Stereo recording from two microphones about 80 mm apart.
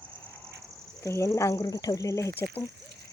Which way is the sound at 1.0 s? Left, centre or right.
Left.